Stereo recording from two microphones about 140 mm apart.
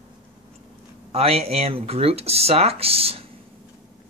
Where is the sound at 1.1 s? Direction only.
45° right (ahead or behind).